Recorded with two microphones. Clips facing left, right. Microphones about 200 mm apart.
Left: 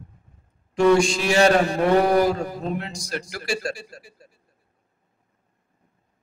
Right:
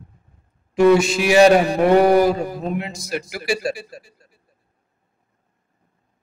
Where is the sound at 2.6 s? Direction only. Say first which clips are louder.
Right 3 dB; 5° right (ahead or behind).